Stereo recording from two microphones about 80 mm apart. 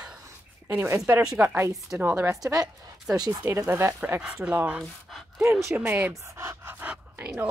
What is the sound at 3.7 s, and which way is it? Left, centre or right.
Speech, right.